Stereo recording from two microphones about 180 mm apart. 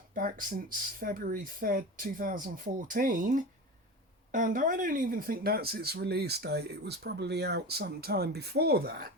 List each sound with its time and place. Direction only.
0.1 s speech: 50° right (ahead or behind)